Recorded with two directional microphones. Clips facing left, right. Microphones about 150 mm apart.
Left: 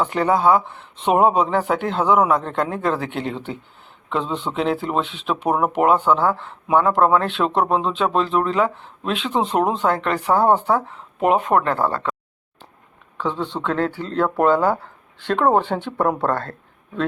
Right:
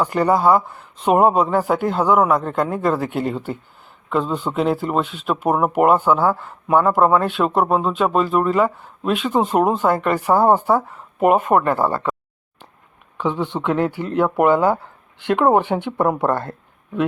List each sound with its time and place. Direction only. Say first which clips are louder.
0.0 s speech: right 1 dB; centre (ahead or behind)
13.1 s speech: right 3 dB; 15° right (ahead or behind)